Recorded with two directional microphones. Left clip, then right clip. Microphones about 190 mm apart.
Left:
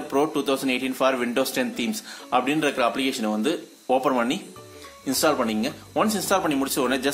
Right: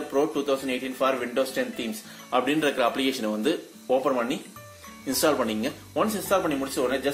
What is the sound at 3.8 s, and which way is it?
A man's voice, 25° left (ahead or behind).